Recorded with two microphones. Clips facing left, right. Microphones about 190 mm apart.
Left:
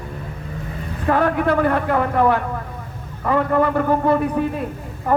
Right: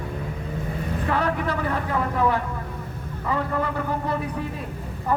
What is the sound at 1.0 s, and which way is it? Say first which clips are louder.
A man's voice: left 8 dB; 50° left (ahead or behind).